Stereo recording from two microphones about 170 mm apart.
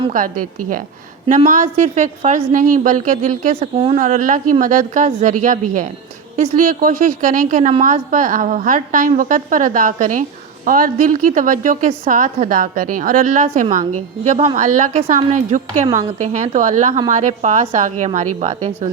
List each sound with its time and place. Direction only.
1.5 s a woman's voice: 50° right (ahead or behind)
4.0 s a woman's voice: 50° right (ahead or behind)